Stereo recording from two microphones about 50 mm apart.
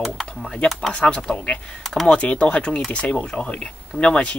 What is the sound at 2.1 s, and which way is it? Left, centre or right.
Speech, left.